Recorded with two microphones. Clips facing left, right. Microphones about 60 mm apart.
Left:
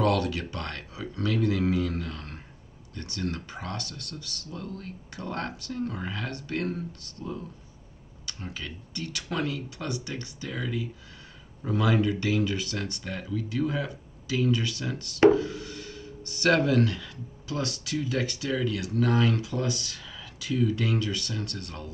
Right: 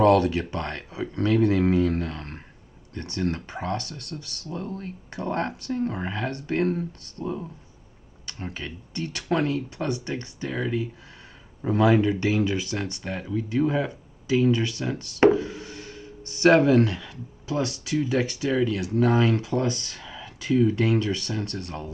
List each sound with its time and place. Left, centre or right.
0.0 s speech: right